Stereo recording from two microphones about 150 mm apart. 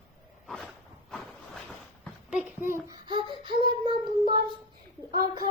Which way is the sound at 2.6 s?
15° right (ahead or behind).